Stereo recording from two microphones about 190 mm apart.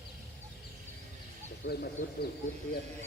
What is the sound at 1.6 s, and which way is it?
Speech, 50° left (ahead or behind).